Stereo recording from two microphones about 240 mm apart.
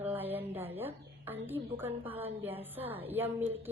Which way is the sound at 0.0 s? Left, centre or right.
Centre.